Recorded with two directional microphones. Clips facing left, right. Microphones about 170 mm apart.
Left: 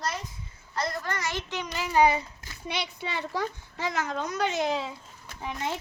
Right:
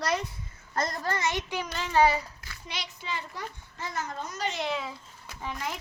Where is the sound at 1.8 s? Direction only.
10° left (ahead or behind).